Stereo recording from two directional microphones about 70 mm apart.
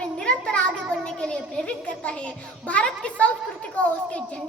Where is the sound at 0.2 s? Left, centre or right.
Centre.